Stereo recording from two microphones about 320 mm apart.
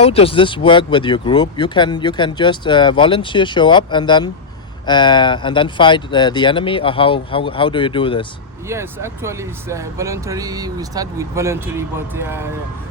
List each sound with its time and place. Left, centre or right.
0.0 s speech: centre
8.6 s speech: centre